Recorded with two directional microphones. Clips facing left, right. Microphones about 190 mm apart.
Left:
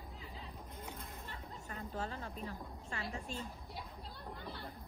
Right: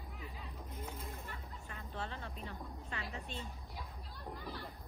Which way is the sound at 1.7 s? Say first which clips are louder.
Left 3 dB; 40° left (ahead or behind).